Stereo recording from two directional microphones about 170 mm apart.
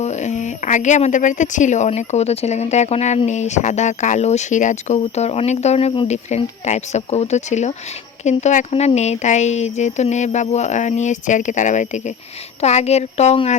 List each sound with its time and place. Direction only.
0.0 s speech: 40° left (ahead or behind)